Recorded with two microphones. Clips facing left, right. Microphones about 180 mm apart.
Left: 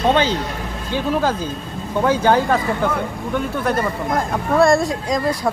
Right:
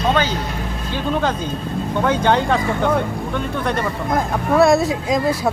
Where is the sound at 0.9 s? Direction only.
5° left (ahead or behind).